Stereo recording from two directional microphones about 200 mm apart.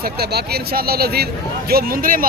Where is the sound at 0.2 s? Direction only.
50° right (ahead or behind).